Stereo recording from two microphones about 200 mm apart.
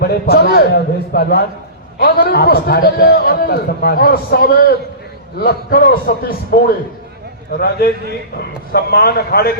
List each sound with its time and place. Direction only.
0.0 s a man's voice: 50° left (ahead or behind)